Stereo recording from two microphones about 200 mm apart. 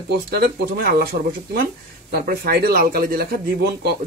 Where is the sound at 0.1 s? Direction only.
55° right (ahead or behind).